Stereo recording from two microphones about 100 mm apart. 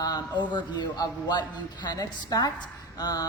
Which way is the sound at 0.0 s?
45° left (ahead or behind).